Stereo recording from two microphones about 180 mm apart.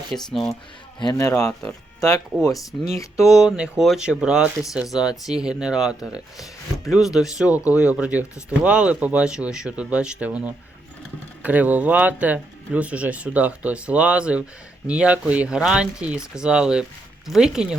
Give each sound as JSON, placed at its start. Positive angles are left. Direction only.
{"t": 0.1, "sound": "speech", "side_deg": 0}
{"t": 0.9, "sound": "speech", "side_deg": 20}
{"t": 3.2, "sound": "speech", "side_deg": -5}